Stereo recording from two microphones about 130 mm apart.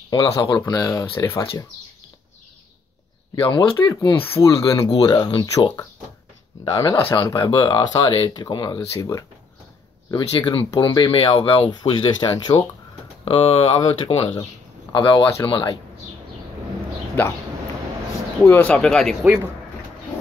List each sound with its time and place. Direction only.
0.1 s speech: 35° left (ahead or behind)
3.3 s speech: 40° left (ahead or behind)
3.7 s speech: 25° left (ahead or behind)
10.1 s speech: 40° left (ahead or behind)
14.9 s speech: 35° left (ahead or behind)
18.4 s speech: 15° left (ahead or behind)